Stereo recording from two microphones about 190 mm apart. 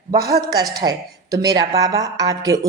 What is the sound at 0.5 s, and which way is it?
A woman's voice, 20° right (ahead or behind).